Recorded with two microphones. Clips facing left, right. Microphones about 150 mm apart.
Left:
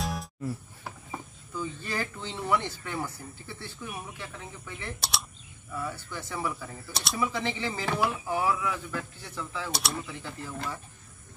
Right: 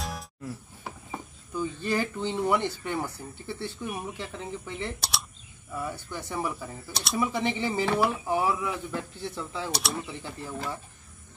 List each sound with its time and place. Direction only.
0.0 s music: centre (ahead or behind)
1.5 s speech: 15° right (ahead or behind)
6.9 s speech: centre (ahead or behind)
7.2 s speech: 15° right (ahead or behind)
8.4 s speech: 20° right (ahead or behind)
9.7 s speech: centre (ahead or behind)
10.0 s speech: 20° right (ahead or behind)